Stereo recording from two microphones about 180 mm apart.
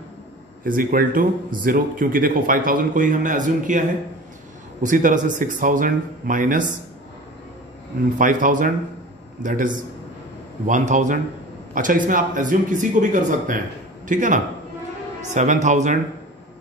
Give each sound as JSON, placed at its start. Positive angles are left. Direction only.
{"t": 0.7, "sound": "speech", "side_deg": -50}
{"t": 4.8, "sound": "speech", "side_deg": -45}
{"t": 8.2, "sound": "a man's voice", "side_deg": -45}